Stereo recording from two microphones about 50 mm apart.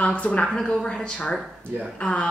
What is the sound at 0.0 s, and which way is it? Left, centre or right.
A woman's voice, left.